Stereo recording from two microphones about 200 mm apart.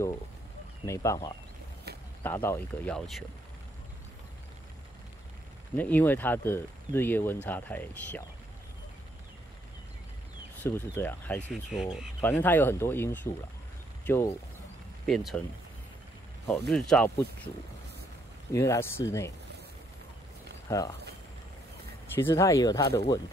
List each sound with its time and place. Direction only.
0.8 s speech: 15° left (ahead or behind)
1.9 s a sound: 55° right (ahead or behind)
2.2 s speech: 10° left (ahead or behind)
5.8 s speech: 10° left (ahead or behind)
10.6 s speech: 10° left (ahead or behind)
11.4 s speech: 5° right (ahead or behind)
12.2 s speech: 10° left (ahead or behind)
16.4 s speech: centre (ahead or behind)
18.5 s speech: 15° left (ahead or behind)
20.6 s speech: 15° left (ahead or behind)
22.1 s speech: 10° left (ahead or behind)